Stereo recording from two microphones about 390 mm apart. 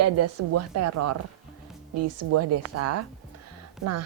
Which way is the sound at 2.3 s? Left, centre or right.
Right.